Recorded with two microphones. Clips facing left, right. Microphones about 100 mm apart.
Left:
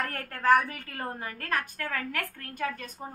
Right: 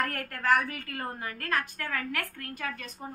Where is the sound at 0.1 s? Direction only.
20° left (ahead or behind).